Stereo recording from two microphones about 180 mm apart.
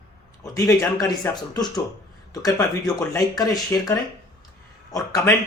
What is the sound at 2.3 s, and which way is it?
Speech, 20° left (ahead or behind).